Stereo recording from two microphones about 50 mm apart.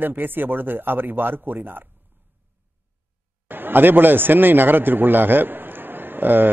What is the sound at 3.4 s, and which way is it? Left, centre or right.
A man's voice, right.